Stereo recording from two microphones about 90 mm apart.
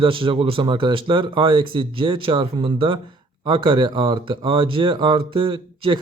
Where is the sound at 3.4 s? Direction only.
60° right (ahead or behind).